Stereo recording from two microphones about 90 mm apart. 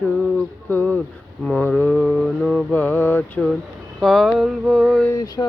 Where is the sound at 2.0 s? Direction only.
5° left (ahead or behind).